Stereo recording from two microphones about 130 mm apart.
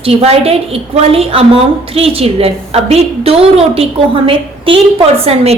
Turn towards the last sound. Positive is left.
turn(degrees=-50)  # may be behind; listen again after turning